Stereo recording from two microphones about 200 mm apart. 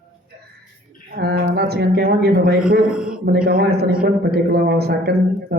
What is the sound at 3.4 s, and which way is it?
Speech, 50° right (ahead or behind).